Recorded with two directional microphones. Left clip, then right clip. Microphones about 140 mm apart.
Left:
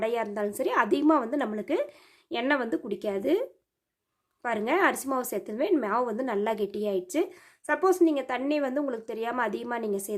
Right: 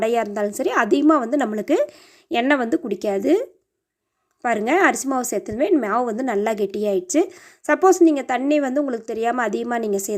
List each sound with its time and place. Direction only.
0.0 s a woman's voice: 30° right (ahead or behind)
4.4 s a woman's voice: 30° right (ahead or behind)